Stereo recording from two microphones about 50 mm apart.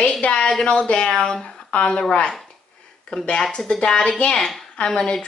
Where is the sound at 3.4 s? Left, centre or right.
Centre.